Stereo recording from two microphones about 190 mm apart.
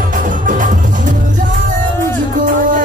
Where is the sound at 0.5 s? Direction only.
45° right (ahead or behind).